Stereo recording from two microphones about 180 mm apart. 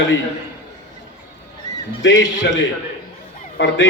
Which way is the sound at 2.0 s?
90° left.